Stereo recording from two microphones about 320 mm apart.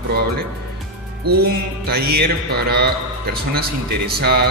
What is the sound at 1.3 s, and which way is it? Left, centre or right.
Music, right.